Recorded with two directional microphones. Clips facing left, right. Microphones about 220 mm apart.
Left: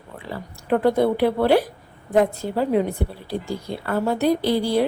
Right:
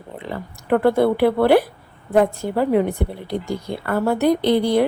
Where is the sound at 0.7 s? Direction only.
65° right (ahead or behind).